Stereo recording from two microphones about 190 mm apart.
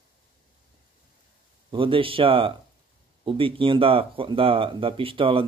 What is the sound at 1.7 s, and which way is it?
Speech, 25° right (ahead or behind).